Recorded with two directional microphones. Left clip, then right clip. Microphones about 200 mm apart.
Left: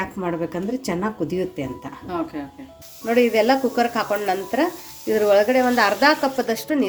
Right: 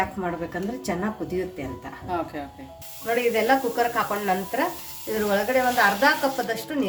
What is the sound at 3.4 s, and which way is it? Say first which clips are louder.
Speech: left 3 dB; 45° left (ahead or behind).